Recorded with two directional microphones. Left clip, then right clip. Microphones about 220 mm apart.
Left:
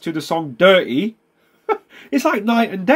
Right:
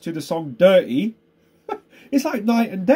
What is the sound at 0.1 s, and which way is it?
Speech, 10° right (ahead or behind).